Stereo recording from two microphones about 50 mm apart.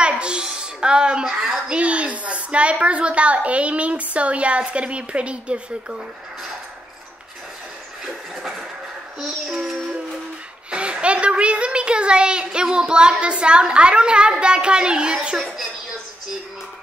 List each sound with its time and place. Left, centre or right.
0.1 s music: centre
1.7 s a woman's voice: right
8.0 s train: centre
9.2 s child singing: centre
10.7 s a woman's voice: right